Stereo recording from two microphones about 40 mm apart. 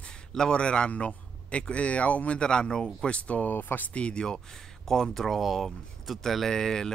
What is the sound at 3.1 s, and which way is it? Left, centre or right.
Speech, left.